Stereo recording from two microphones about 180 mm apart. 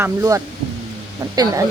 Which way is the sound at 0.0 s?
15° right (ahead or behind).